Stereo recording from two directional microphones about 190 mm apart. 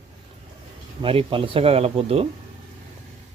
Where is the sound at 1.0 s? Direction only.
30° right (ahead or behind).